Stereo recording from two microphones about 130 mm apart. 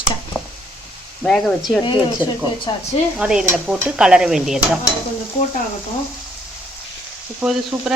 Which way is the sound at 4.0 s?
5° right (ahead or behind).